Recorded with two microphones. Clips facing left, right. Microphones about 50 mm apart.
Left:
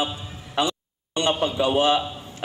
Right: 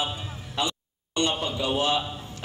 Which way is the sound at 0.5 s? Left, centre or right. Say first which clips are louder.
Left 5 dB; left.